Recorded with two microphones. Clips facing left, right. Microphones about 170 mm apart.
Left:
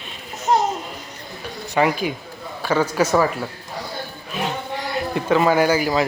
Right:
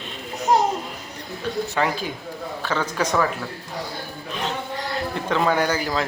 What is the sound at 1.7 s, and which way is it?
Speech, 15° left (ahead or behind).